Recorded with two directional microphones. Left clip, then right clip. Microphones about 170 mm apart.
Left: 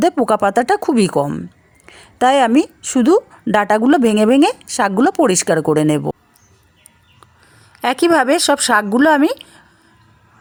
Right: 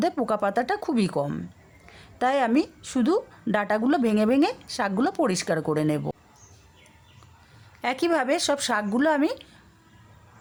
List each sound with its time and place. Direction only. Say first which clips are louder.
0.0 s speech: left 10 dB; 40° left (ahead or behind)
7.8 s speech: left 11 dB; 40° left (ahead or behind)